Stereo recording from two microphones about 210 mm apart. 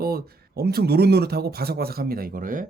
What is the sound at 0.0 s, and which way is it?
Speech, 45° right (ahead or behind).